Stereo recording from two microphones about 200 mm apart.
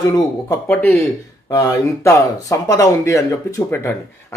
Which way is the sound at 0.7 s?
Centre (ahead or behind).